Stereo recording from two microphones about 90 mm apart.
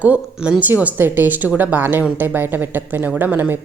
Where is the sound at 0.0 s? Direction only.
15° right (ahead or behind).